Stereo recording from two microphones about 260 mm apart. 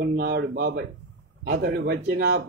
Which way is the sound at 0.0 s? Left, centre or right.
Right.